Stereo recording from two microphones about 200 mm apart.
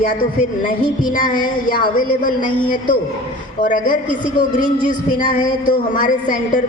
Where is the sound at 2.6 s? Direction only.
25° left (ahead or behind).